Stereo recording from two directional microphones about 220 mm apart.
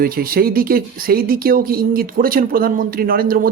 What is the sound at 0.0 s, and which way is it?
Speech, 40° right (ahead or behind).